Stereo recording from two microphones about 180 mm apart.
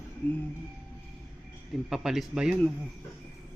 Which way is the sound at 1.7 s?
Centre (ahead or behind).